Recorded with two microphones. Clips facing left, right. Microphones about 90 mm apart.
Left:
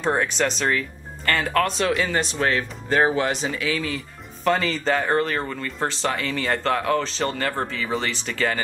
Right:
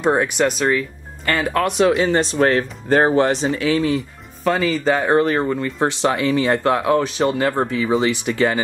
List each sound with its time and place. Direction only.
0.0 s speech: 10° right (ahead or behind)
2.0 s speech: 30° right (ahead or behind)
3.7 s speech: 20° right (ahead or behind)
4.5 s speech: 5° right (ahead or behind)